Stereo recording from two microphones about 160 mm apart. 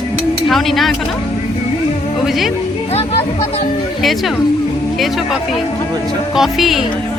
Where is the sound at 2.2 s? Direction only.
Centre (ahead or behind).